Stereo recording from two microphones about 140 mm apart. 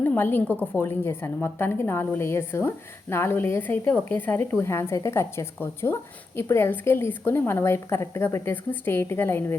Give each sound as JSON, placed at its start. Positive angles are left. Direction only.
{"t": 0.0, "sound": "a woman's voice", "side_deg": 15}